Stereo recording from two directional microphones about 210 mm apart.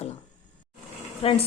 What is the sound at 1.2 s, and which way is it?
Speech, 25° left (ahead or behind).